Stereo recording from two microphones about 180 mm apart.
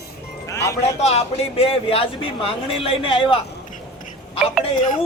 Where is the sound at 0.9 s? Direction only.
35° left (ahead or behind).